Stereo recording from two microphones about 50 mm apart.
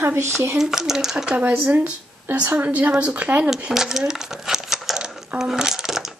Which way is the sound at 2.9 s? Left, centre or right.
Centre.